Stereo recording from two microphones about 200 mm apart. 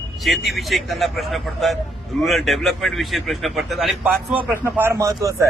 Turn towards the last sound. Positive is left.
turn(degrees=-15)  # may be behind; listen again after turning